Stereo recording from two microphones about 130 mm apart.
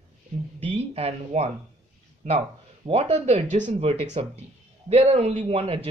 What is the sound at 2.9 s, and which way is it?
Speech, 50° right (ahead or behind).